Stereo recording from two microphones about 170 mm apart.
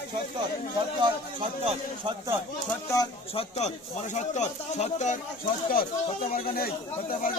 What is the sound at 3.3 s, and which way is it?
Speech, 40° left (ahead or behind).